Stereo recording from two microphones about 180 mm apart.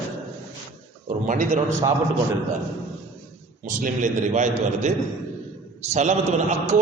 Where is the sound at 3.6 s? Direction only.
45° right (ahead or behind).